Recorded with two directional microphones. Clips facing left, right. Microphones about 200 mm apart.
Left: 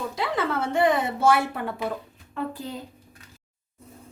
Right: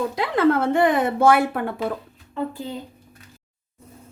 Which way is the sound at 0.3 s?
55° right (ahead or behind).